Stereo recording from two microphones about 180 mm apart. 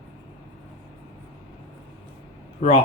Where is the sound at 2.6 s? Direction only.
30° left (ahead or behind).